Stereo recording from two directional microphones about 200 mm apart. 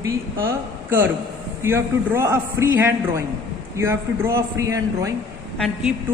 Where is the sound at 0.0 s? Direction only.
15° right (ahead or behind).